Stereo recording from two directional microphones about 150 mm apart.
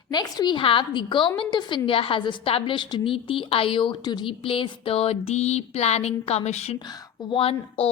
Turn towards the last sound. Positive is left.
turn(degrees=40)  # may be behind; listen again after turning